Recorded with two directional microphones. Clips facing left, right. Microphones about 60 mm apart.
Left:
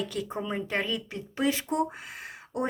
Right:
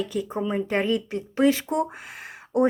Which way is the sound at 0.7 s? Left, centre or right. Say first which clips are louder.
Right 7 dB; right.